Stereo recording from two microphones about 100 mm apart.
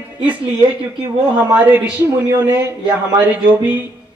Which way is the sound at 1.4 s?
15° right (ahead or behind).